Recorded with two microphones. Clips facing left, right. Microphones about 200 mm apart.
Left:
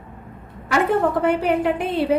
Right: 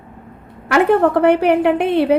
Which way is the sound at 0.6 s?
65° right (ahead or behind).